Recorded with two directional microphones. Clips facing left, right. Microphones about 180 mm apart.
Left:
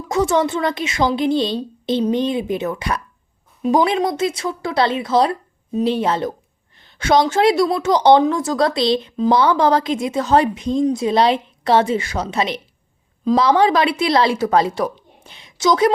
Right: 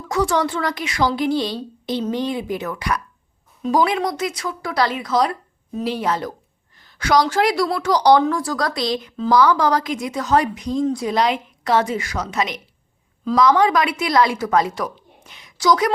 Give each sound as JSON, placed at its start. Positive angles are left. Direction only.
{"t": 0.1, "sound": "a woman's voice", "side_deg": 20}
{"t": 9.1, "sound": "a woman's voice", "side_deg": 15}